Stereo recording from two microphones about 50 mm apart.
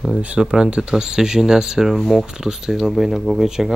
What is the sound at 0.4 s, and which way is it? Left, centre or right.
Speech, centre.